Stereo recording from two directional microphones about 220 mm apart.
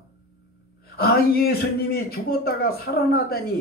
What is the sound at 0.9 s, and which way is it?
A man's voice, 45° left (ahead or behind).